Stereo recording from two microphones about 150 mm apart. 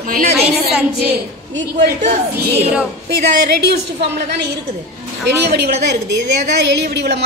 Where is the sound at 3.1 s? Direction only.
90° right.